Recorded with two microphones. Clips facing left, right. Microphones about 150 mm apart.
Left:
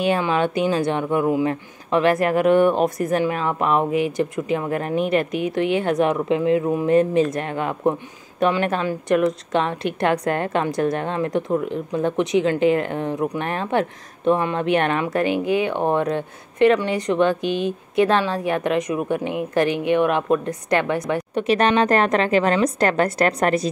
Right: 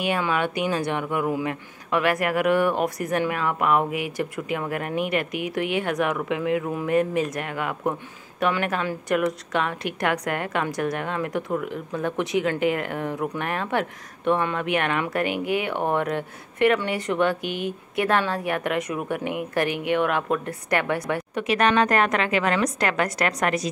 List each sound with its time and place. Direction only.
0.0 s a woman's voice: 30° left (ahead or behind)